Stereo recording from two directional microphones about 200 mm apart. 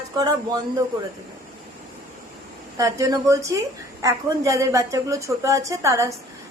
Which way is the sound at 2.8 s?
15° right (ahead or behind).